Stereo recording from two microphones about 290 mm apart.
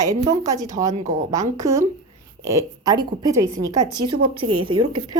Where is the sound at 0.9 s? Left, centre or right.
Right.